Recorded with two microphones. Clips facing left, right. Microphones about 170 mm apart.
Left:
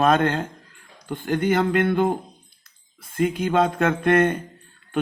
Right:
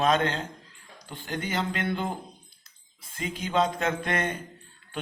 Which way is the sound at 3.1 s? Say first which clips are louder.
Left 7 dB; 55° left (ahead or behind).